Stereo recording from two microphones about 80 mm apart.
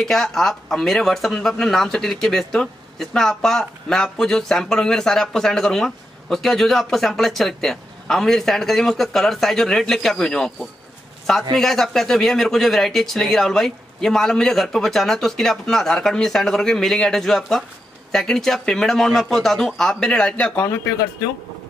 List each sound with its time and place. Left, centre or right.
0.0 s speech: centre